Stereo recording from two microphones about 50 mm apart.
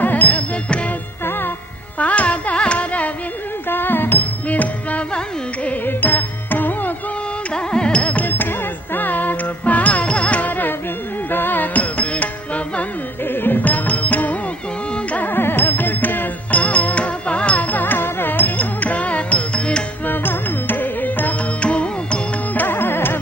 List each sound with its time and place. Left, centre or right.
0.0 s music: left
1.2 s music: left
2.0 s carnatic music: left
3.7 s music: left
7.5 s music: centre
8.3 s music: left
13.2 s music: left
15.2 s music: left
20.1 s music: left
22.5 s music: left